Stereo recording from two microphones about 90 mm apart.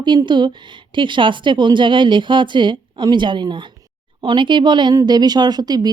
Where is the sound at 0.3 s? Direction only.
60° right (ahead or behind).